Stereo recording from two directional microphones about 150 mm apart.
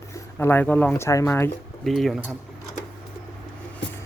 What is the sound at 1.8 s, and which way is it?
Speech, centre (ahead or behind).